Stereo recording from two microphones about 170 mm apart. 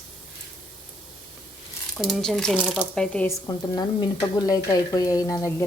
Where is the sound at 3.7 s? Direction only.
20° left (ahead or behind).